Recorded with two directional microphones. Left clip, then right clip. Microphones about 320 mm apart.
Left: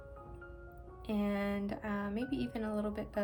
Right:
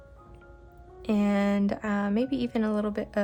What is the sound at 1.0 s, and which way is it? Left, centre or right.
A woman's voice, centre.